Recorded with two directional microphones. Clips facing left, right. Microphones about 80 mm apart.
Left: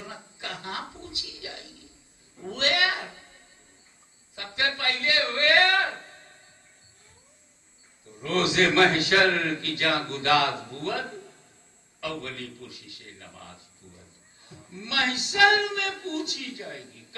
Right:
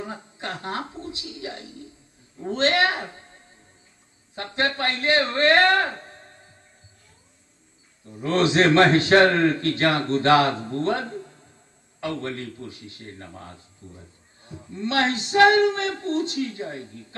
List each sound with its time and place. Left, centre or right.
0.0 s music: right
2.4 s a man's voice: right
4.4 s a man's voice: right
8.2 s a man's voice: right